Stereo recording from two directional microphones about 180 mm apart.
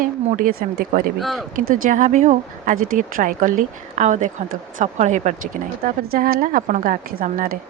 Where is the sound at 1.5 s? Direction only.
50° right (ahead or behind).